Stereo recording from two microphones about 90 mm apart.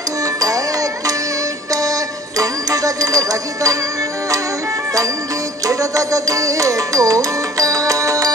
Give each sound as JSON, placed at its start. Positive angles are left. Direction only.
{"t": 1.7, "sound": "music", "side_deg": -40}
{"t": 5.7, "sound": "music", "side_deg": -40}